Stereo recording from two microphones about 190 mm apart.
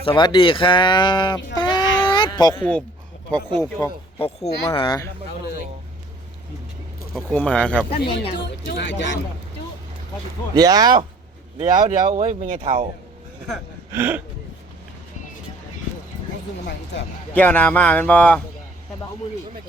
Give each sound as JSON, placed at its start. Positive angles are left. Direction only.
{"t": 0.0, "sound": "speech", "side_deg": 25}
{"t": 1.5, "sound": "a sound", "side_deg": 25}
{"t": 3.6, "sound": "speech", "side_deg": 15}
{"t": 4.4, "sound": "speech", "side_deg": 25}
{"t": 7.1, "sound": "speech", "side_deg": 0}
{"t": 7.9, "sound": "speech", "side_deg": 30}
{"t": 8.6, "sound": "speech", "side_deg": 60}
{"t": 10.5, "sound": "speech", "side_deg": -20}
{"t": 11.6, "sound": "speech", "side_deg": -40}
{"t": 13.9, "sound": "speech", "side_deg": -10}
{"t": 16.6, "sound": "speech", "side_deg": 65}
{"t": 17.3, "sound": "speech", "side_deg": 10}